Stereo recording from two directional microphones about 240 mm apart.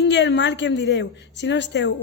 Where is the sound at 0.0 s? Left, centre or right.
Left.